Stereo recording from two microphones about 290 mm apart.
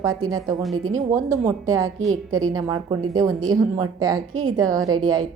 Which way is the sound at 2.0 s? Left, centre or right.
Centre.